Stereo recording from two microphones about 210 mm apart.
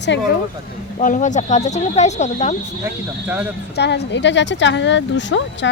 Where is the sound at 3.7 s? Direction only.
55° left (ahead or behind).